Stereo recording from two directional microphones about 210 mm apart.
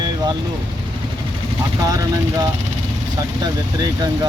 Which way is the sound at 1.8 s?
15° right (ahead or behind).